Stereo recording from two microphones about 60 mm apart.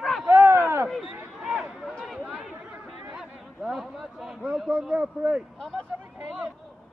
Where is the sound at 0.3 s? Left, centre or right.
Right.